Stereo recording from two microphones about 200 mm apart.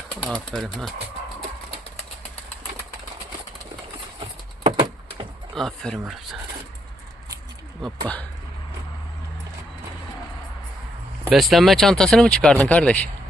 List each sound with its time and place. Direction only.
0.2 s speech: centre (ahead or behind)
4.2 s a sound: 25° right (ahead or behind)
5.5 s speech: 5° left (ahead or behind)
7.8 s speech: 5° left (ahead or behind)
11.3 s speech: centre (ahead or behind)